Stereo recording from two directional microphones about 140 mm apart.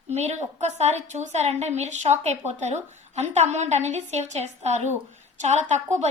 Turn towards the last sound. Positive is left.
turn(degrees=-55)  # may be behind; listen again after turning